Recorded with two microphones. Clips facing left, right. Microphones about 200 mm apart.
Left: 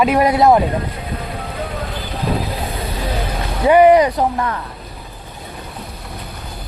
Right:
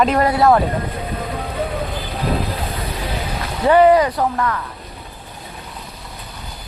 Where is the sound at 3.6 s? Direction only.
15° left (ahead or behind).